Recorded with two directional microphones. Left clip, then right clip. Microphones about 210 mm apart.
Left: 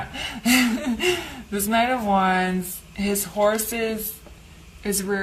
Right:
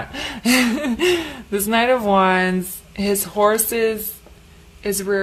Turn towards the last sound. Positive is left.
turn(degrees=-40)  # may be behind; listen again after turning